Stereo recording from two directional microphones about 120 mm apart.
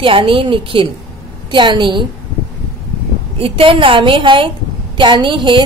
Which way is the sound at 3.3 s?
50° right (ahead or behind).